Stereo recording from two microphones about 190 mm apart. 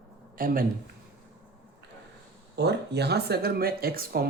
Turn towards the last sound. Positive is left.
turn(degrees=-50)  # may be behind; listen again after turning